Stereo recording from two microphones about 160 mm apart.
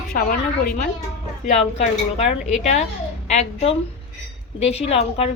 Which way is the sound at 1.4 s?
45° left (ahead or behind).